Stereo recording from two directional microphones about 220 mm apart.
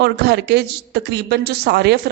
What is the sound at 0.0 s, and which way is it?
A man's voice, 50° right (ahead or behind).